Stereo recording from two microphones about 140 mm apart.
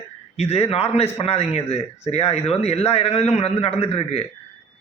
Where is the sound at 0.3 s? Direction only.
50° left (ahead or behind).